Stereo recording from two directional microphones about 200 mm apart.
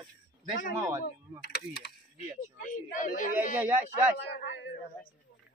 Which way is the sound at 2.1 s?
40° left (ahead or behind).